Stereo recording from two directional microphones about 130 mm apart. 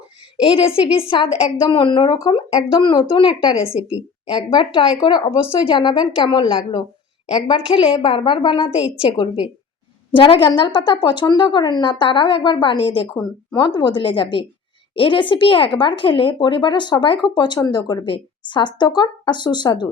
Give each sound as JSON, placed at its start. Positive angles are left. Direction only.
{"t": 0.4, "sound": "a woman's voice", "side_deg": 45}
{"t": 4.5, "sound": "a woman's voice", "side_deg": 40}